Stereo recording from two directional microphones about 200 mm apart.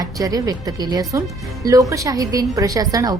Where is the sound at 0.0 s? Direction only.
15° right (ahead or behind).